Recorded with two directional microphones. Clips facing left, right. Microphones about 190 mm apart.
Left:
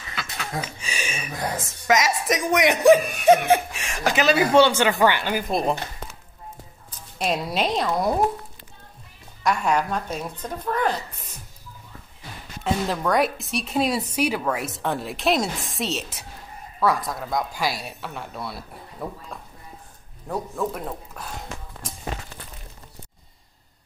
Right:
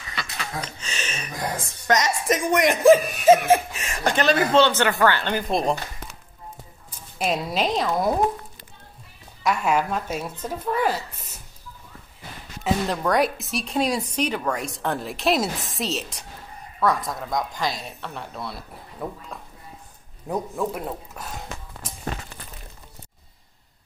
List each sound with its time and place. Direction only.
0.1 s a sound: centre (ahead or behind)
1.9 s speech: 5° left (ahead or behind)
7.2 s speech: centre (ahead or behind)
9.4 s speech: 5° right (ahead or behind)
12.6 s speech: centre (ahead or behind)
20.2 s speech: 10° right (ahead or behind)